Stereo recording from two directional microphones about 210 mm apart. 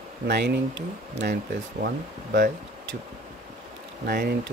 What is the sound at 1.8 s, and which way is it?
Speech, 50° right (ahead or behind).